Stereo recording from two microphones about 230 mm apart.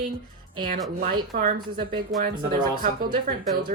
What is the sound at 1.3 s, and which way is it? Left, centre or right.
Speech, right.